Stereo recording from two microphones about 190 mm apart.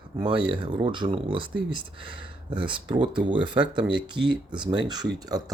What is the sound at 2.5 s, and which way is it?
Speech, 25° right (ahead or behind).